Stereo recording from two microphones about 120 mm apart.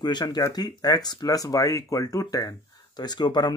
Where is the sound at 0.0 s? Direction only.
35° left (ahead or behind).